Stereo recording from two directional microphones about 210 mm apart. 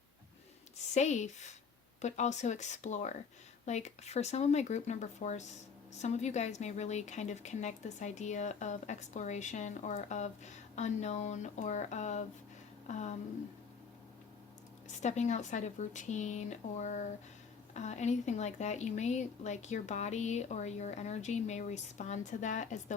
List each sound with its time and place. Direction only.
0.9 s a woman's voice: 35° left (ahead or behind)
15.0 s a woman's voice: 35° left (ahead or behind)